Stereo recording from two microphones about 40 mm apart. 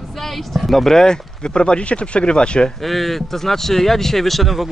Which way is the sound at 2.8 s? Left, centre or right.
Centre.